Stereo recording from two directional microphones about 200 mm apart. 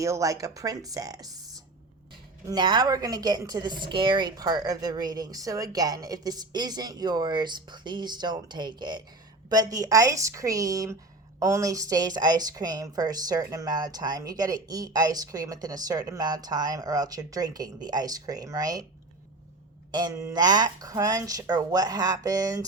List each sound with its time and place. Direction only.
0.0 s a woman's voice: 15° right (ahead or behind)
2.5 s a woman's voice: 20° right (ahead or behind)
19.9 s a woman's voice: 20° right (ahead or behind)